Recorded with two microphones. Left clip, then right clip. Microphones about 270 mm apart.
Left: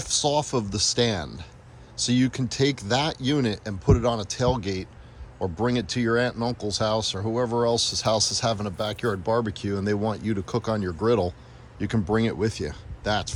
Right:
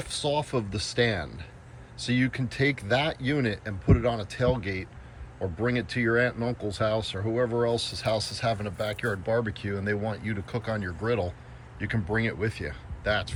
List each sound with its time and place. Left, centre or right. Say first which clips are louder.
0.0 s speech: left 5 dB; centre